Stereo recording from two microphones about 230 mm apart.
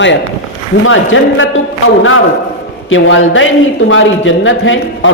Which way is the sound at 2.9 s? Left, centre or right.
Left.